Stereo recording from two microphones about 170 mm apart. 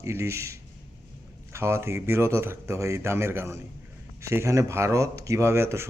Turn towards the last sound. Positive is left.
turn(degrees=-15)  # may be behind; listen again after turning